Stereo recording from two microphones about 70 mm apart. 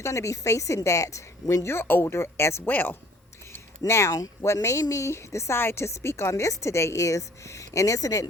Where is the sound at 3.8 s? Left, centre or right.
Left.